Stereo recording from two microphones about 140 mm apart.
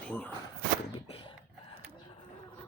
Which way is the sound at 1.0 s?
40° left (ahead or behind).